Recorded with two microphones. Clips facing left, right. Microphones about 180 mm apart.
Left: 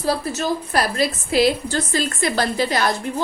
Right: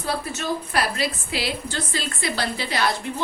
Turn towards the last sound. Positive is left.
turn(degrees=45)  # may be behind; listen again after turning